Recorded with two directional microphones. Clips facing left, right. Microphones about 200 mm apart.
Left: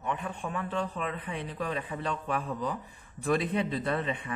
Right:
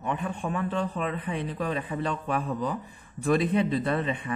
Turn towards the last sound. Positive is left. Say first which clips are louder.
# right 4 dB
turn(degrees=-30)  # may be behind; listen again after turning